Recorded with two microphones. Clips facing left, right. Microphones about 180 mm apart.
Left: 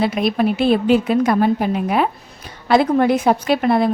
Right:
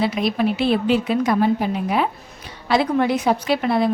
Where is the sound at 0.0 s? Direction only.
50° left (ahead or behind).